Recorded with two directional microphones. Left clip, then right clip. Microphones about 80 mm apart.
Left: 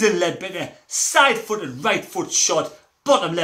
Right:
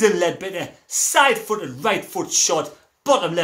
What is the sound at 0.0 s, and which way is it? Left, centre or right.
Speech, right.